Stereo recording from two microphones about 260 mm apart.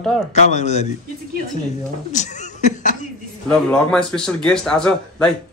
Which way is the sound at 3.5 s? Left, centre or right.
Centre.